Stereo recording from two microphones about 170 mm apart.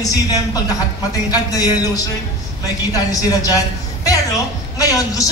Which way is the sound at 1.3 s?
20° left (ahead or behind).